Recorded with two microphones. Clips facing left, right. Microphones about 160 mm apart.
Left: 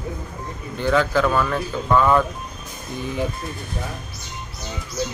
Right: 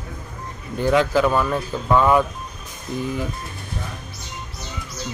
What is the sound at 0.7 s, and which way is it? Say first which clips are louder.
A man's voice: right 1 dB; 10° right (ahead or behind).